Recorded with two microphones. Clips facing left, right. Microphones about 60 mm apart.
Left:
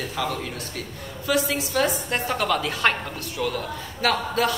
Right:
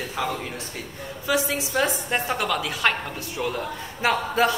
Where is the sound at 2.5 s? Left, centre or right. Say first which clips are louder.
Left 2 dB; centre.